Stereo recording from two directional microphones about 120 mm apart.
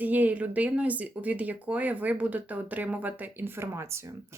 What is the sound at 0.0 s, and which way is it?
Speech, 15° right (ahead or behind).